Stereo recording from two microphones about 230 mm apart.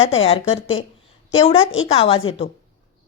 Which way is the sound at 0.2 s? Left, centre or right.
Left.